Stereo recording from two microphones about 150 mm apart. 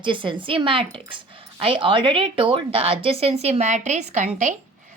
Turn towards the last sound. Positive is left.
turn(degrees=-55)  # may be behind; listen again after turning